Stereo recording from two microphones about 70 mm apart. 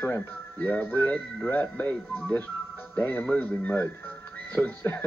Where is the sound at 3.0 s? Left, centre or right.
Left.